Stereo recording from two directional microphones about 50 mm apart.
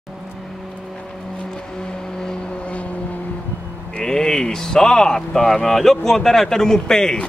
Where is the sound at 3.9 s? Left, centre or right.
Left.